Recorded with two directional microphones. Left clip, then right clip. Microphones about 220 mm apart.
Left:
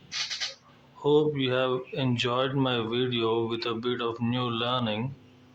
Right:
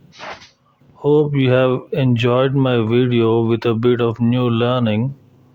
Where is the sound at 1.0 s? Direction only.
35° right (ahead or behind).